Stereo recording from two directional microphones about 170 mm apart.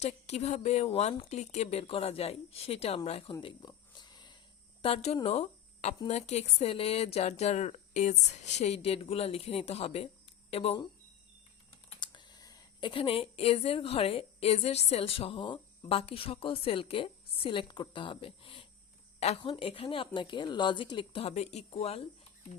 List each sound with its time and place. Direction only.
0.0 s speech: 40° left (ahead or behind)
3.4 s a sound: 25° left (ahead or behind)
4.8 s speech: 35° left (ahead or behind)
11.9 s speech: 25° left (ahead or behind)